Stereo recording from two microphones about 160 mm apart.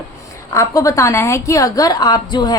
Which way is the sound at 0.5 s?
20° left (ahead or behind).